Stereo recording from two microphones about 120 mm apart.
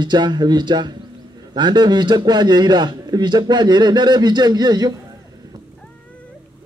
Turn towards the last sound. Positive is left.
turn(degrees=-35)  # may be behind; listen again after turning